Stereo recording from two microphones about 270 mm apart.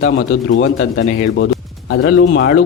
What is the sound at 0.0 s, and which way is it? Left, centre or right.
A man's voice, left.